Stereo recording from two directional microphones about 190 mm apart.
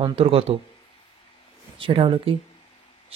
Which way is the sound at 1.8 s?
25° right (ahead or behind).